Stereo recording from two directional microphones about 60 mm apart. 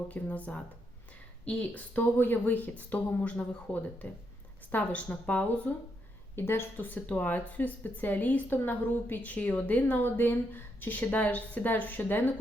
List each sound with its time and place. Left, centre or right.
0.1 s speech: left
6.3 s a woman's voice: left